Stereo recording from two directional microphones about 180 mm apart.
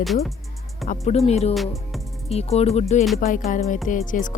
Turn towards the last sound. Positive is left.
turn(degrees=45)  # may be behind; listen again after turning